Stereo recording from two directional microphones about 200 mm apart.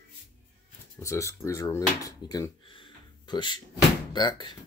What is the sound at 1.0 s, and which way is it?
Speech, 15° left (ahead or behind).